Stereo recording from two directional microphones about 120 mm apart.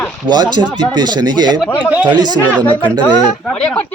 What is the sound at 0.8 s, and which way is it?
Speech, 35° right (ahead or behind).